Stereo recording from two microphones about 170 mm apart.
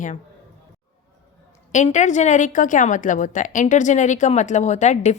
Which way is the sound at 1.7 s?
45° left (ahead or behind).